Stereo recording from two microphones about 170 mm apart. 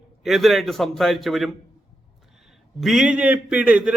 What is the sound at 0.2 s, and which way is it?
A man's voice, centre (ahead or behind).